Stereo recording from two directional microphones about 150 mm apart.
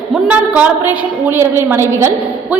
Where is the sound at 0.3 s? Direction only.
10° right (ahead or behind).